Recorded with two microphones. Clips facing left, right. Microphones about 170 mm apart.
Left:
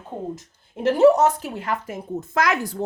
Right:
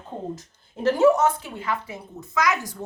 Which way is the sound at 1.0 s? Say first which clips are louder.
Left 4 dB; 35° left (ahead or behind).